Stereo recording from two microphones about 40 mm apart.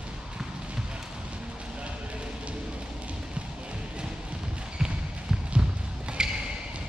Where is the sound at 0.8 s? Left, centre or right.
Right.